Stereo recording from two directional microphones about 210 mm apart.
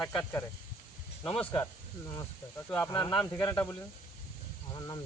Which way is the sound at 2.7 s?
15° left (ahead or behind).